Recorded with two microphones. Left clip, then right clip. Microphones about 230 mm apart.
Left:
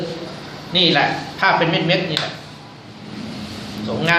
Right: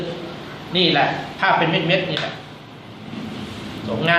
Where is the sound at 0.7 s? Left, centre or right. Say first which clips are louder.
Left 2 dB; left.